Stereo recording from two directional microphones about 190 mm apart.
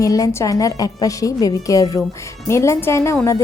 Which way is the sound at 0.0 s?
15° left (ahead or behind).